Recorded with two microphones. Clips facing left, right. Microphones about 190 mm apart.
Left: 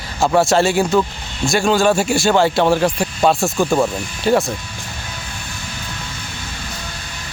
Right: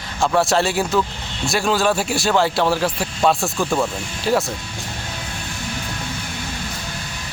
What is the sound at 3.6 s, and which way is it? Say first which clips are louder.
Speech: left 4 dB; 15° left (ahead or behind).